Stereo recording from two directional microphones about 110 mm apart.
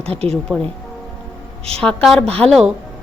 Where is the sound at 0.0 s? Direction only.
65° right (ahead or behind).